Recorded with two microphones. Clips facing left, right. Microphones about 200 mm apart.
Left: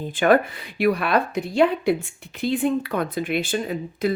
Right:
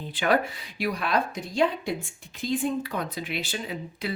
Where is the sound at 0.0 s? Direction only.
50° left (ahead or behind).